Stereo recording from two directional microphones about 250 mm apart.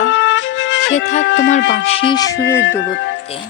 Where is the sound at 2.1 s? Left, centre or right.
Centre.